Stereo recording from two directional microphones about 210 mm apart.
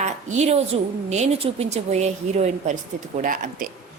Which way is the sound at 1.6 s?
30° right (ahead or behind).